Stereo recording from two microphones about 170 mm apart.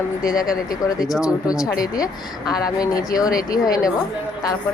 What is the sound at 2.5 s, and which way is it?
Speech, 20° left (ahead or behind).